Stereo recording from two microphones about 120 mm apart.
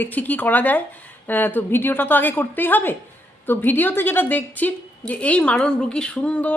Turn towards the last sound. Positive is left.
turn(degrees=10)  # may be behind; listen again after turning